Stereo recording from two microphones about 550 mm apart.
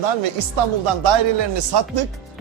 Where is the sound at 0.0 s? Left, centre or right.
Right.